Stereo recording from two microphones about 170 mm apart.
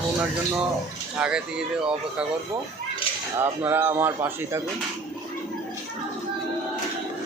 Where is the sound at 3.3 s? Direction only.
15° right (ahead or behind).